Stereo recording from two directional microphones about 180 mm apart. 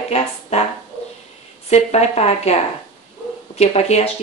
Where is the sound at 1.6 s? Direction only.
35° left (ahead or behind).